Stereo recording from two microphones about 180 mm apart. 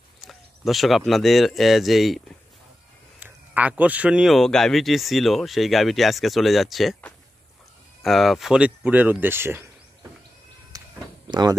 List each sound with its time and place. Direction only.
0.2 s speech: centre (ahead or behind)
3.2 s speech: 10° right (ahead or behind)
10.7 s a sound: 20° right (ahead or behind)